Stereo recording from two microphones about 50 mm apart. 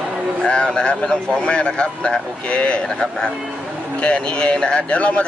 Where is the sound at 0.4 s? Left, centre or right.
Centre.